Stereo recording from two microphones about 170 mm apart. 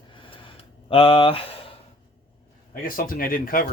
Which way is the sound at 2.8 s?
55° left (ahead or behind).